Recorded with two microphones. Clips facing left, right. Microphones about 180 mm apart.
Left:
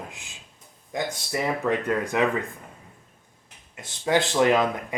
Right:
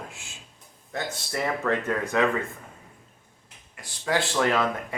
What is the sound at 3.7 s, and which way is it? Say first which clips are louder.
Speech: left 4 dB; 20° left (ahead or behind).